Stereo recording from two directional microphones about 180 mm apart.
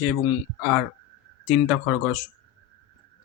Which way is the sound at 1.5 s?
5° right (ahead or behind).